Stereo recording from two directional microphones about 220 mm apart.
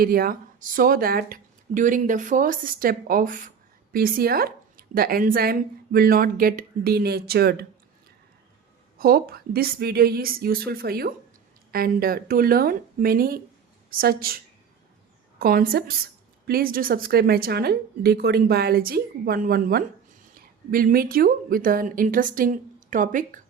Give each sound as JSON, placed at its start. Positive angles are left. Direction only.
{"t": 0.0, "sound": "a woman's voice", "side_deg": -45}
{"t": 9.0, "sound": "a woman's voice", "side_deg": -40}
{"t": 15.4, "sound": "a woman's voice", "side_deg": -40}